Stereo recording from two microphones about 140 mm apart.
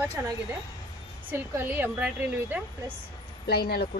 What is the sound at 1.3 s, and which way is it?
A woman's voice, 15° right (ahead or behind).